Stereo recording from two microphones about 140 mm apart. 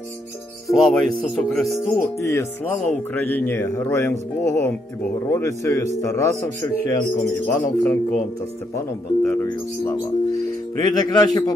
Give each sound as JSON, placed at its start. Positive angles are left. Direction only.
{"t": 0.7, "sound": "speech", "side_deg": 0}
{"t": 1.9, "sound": "a man's voice", "side_deg": 20}
{"t": 9.3, "sound": "a man's voice", "side_deg": 20}